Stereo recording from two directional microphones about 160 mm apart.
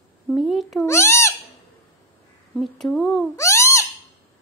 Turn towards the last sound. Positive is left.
turn(degrees=20)  # may be behind; listen again after turning